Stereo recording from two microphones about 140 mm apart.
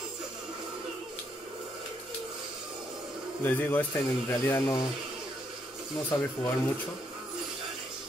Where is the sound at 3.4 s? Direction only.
15° left (ahead or behind).